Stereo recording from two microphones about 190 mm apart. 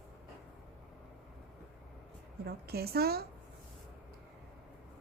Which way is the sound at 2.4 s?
55° right (ahead or behind).